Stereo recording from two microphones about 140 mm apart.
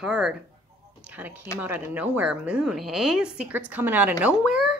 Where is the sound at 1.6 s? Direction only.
10° right (ahead or behind).